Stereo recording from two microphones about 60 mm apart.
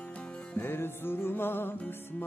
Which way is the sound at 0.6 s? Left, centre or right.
Left.